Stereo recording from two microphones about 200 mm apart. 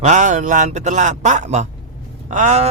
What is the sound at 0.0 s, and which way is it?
Speech, 40° right (ahead or behind).